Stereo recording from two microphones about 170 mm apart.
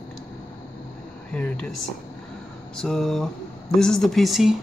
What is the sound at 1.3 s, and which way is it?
Speech, 5° left (ahead or behind).